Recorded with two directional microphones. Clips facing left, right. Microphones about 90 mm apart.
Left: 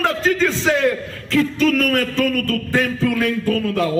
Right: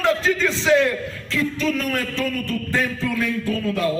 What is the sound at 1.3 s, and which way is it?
Speech, 60° left (ahead or behind).